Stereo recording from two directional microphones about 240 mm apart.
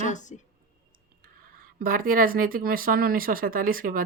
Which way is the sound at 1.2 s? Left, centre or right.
Right.